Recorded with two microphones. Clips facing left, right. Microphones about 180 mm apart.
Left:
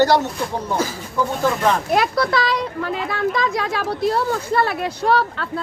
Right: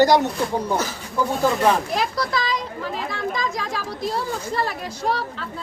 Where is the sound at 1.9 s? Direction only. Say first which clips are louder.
Left 5 dB; 60° left (ahead or behind).